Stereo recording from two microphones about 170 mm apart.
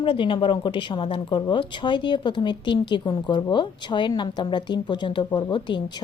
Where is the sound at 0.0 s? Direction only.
30° left (ahead or behind).